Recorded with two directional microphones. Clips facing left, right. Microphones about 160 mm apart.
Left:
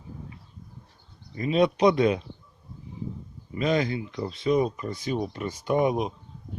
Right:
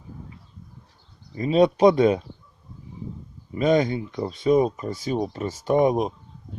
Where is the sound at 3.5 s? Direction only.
45° right (ahead or behind).